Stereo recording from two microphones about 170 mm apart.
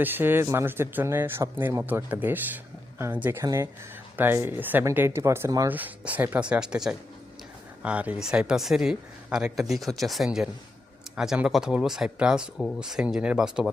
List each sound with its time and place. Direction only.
0.0 s speech: 10° right (ahead or behind)